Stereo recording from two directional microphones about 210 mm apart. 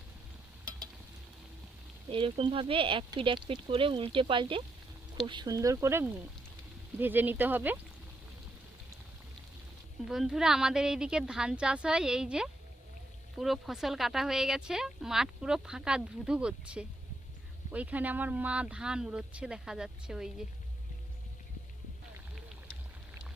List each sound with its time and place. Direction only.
2.0 s speech: 25° right (ahead or behind); by 7.8 s 10° right (ahead or behind)
10.1 s speech: centre (ahead or behind)